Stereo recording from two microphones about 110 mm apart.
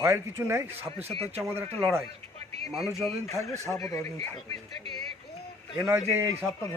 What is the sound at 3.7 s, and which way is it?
Speech, 30° left (ahead or behind).